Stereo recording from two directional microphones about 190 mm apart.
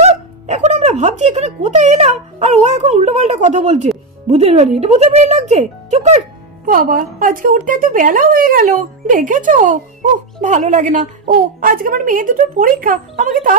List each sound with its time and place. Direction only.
0.0 s speech: 35° right (ahead or behind)
6.6 s a woman's voice: 45° right (ahead or behind)